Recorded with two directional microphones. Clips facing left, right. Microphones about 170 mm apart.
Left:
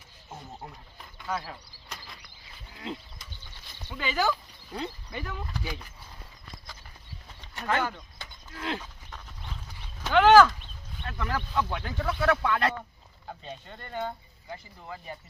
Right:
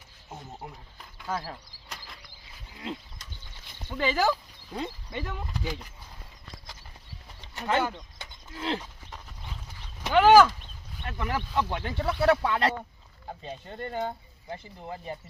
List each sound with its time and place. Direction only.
1.3 s speech: 35° right (ahead or behind)
3.8 s speech: 35° right (ahead or behind)
7.5 s bird: 20° right (ahead or behind)
7.8 s speech: 20° right (ahead or behind)
8.5 s a sound: 25° right (ahead or behind)
10.0 s speech: 10° right (ahead or behind)